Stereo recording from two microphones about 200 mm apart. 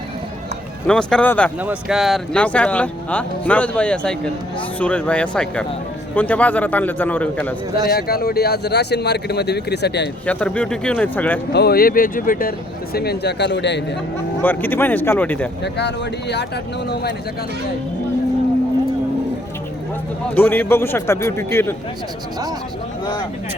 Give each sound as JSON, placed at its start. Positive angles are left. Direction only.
{"t": 0.9, "sound": "speech", "side_deg": 5}
{"t": 1.6, "sound": "a man's voice", "side_deg": -5}
{"t": 7.9, "sound": "speech", "side_deg": 50}
{"t": 10.2, "sound": "a man's voice", "side_deg": 5}
{"t": 11.5, "sound": "speech", "side_deg": 50}
{"t": 14.4, "sound": "a man's voice", "side_deg": 10}
{"t": 16.9, "sound": "speech", "side_deg": 55}
{"t": 20.3, "sound": "a man's voice", "side_deg": 10}